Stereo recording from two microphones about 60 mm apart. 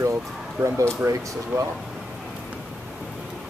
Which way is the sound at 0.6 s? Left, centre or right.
Right.